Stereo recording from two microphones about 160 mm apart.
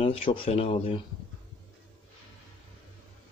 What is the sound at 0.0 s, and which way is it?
Speech, 35° left (ahead or behind).